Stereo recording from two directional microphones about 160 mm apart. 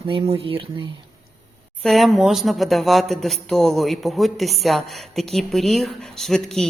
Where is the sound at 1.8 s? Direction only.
Centre (ahead or behind).